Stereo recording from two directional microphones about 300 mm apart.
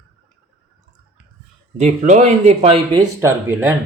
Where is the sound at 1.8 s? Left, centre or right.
Right.